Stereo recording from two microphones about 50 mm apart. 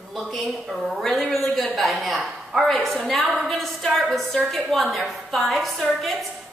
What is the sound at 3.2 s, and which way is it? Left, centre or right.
Speech, centre.